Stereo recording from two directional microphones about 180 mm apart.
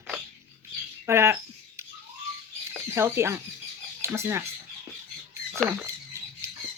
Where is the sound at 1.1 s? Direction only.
15° right (ahead or behind).